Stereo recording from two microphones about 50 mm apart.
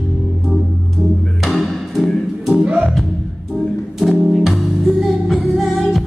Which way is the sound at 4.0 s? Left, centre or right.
Centre.